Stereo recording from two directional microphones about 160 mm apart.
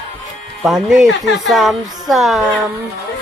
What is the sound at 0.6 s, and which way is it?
A woman's voice, 5° right (ahead or behind).